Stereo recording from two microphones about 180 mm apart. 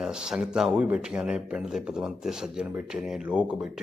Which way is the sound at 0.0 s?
5° right (ahead or behind).